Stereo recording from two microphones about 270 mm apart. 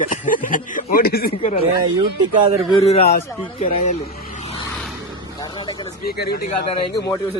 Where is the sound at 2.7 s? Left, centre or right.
Left.